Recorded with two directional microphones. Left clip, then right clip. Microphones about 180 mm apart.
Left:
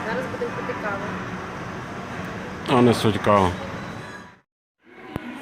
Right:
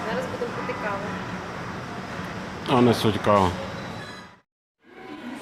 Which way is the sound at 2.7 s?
Centre (ahead or behind).